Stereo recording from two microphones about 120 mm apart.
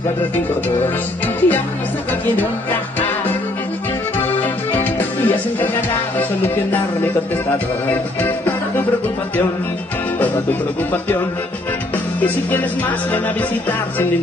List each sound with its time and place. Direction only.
0.8 s music: 15° left (ahead or behind)
4.8 s music: 15° left (ahead or behind)
12.2 s music: 15° left (ahead or behind)